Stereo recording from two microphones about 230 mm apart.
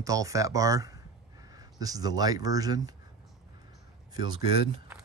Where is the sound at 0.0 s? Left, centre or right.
Centre.